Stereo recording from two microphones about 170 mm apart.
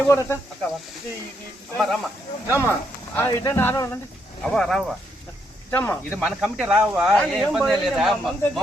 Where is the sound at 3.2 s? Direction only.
15° left (ahead or behind).